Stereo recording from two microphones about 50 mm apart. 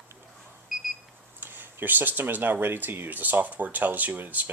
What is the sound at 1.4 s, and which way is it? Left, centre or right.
Speech, right.